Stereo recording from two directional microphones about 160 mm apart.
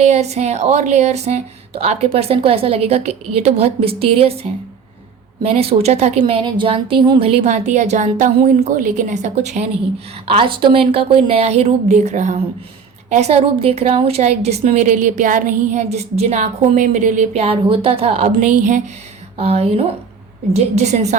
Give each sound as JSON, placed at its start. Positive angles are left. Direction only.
{"t": 0.0, "sound": "a woman's voice", "side_deg": -45}
{"t": 10.2, "sound": "a woman's voice", "side_deg": -30}
{"t": 18.3, "sound": "a woman's voice", "side_deg": -50}
{"t": 19.4, "sound": "a woman's voice", "side_deg": -40}